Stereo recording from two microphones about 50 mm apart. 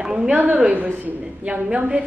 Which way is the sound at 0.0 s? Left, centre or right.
Centre.